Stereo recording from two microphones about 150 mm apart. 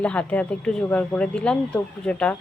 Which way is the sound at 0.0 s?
10° left (ahead or behind).